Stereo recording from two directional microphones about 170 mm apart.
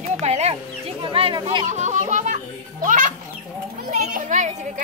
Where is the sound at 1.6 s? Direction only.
45° right (ahead or behind).